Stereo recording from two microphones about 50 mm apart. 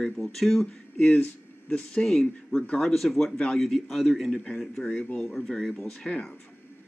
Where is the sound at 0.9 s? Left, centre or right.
Left.